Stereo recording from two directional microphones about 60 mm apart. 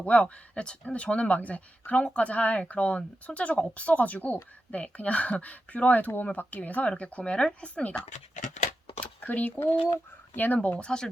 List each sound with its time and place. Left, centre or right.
0.0 s speech: centre
9.0 s speech: left